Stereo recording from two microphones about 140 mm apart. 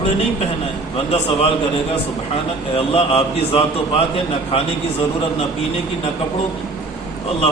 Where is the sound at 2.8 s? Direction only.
45° left (ahead or behind).